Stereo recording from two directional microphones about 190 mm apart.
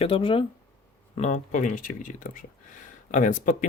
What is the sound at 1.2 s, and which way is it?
Speech, 40° left (ahead or behind).